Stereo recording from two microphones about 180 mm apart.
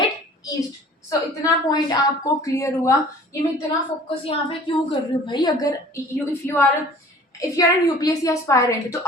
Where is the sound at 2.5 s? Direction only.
15° left (ahead or behind).